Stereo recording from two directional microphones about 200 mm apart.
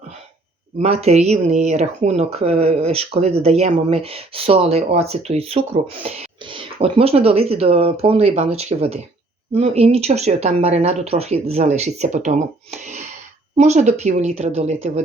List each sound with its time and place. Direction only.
0.8 s speech: 30° right (ahead or behind)
13.6 s speech: 35° right (ahead or behind)